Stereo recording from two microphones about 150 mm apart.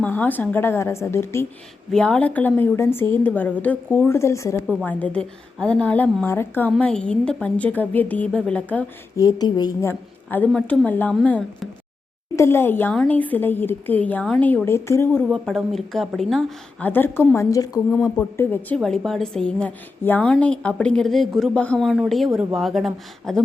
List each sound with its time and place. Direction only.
0.0 s a woman's voice: 10° left (ahead or behind)
1.9 s a woman's voice: 5° left (ahead or behind)
9.1 s a woman's voice: 25° left (ahead or behind)
9.9 s a woman's voice: 10° left (ahead or behind)
15.3 s a woman's voice: centre (ahead or behind)
16.8 s a woman's voice: 15° left (ahead or behind)
18.8 s a woman's voice: centre (ahead or behind)